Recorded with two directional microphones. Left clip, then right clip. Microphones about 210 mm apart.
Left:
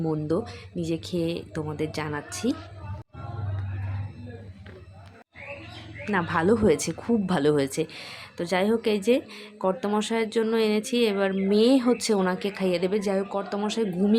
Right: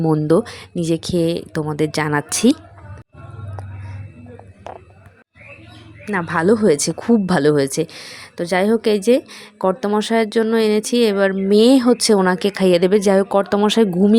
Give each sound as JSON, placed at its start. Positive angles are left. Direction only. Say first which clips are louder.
{"t": 0.0, "sound": "speech", "louder": "right 11 dB", "side_deg": -35}
{"t": 6.1, "sound": "a woman's voice", "louder": "right 6 dB", "side_deg": -20}